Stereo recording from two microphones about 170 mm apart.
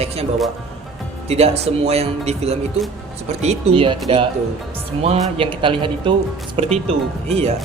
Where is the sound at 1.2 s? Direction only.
35° right (ahead or behind).